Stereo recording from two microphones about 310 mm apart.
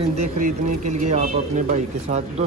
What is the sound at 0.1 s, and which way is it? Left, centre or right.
Speech, right.